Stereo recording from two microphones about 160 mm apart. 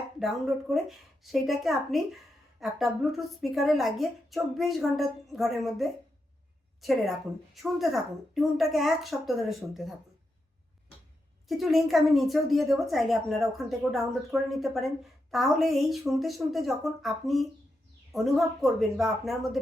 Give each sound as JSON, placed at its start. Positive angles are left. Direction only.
{"t": 0.2, "sound": "a woman's voice", "side_deg": 0}
{"t": 11.4, "sound": "a woman's voice", "side_deg": 0}